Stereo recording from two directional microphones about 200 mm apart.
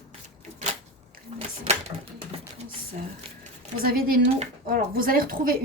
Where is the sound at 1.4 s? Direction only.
30° right (ahead or behind).